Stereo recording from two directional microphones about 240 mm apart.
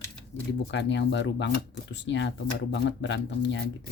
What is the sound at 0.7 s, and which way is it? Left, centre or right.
Speech, left.